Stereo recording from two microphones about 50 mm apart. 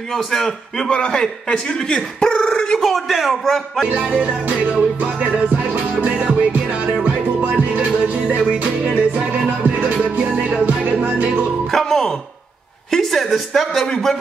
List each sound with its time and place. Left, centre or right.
0.1 s a man's voice: centre
0.8 s speech: centre
2.8 s a man's voice: centre
3.4 s music: centre
3.9 s music: right
10.6 s music: right
11.7 s music: centre
12.9 s a woman's voice: centre
13.8 s music: centre